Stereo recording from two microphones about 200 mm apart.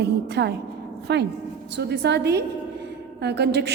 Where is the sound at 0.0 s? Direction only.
55° right (ahead or behind).